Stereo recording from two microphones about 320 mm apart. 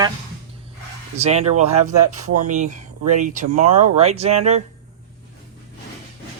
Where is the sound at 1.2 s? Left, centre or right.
Centre.